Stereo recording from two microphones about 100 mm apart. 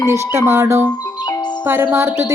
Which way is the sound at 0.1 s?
25° right (ahead or behind).